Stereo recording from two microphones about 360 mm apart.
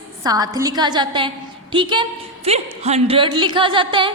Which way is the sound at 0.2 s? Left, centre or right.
Centre.